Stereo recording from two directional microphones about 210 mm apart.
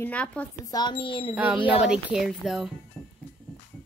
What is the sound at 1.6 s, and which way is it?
Speech, 5° right (ahead or behind).